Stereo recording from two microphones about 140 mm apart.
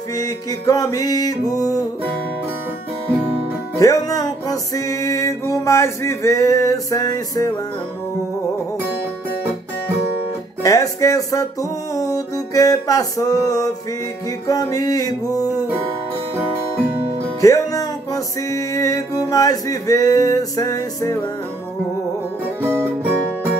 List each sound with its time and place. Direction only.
0.2 s music: 25° left (ahead or behind)
3.7 s music: 25° left (ahead or behind)
10.6 s speech: 20° left (ahead or behind)
11.9 s music: 25° left (ahead or behind)
17.4 s music: 25° left (ahead or behind)
22.6 s music: 15° right (ahead or behind)